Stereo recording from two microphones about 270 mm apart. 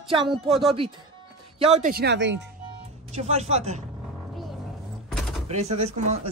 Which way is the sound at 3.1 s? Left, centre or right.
Right.